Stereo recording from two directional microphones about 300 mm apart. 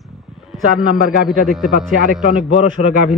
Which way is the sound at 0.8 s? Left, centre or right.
Right.